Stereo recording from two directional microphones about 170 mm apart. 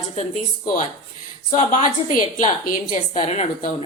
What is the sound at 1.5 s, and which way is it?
A woman's voice, 45° left (ahead or behind).